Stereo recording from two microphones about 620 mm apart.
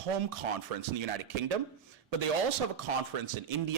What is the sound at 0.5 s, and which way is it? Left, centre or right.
A man's voice, right.